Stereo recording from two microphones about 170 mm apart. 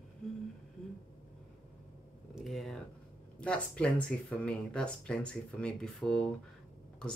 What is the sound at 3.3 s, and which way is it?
Speech, 5° left (ahead or behind).